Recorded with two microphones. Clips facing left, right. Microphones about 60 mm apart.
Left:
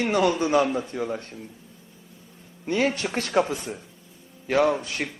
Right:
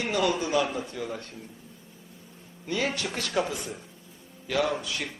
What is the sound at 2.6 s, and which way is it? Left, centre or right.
A man's voice, left.